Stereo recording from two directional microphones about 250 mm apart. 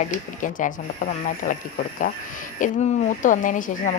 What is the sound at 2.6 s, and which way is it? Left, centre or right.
Speech, left.